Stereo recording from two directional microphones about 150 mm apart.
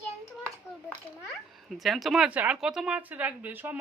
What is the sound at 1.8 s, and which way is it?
Speech, centre (ahead or behind).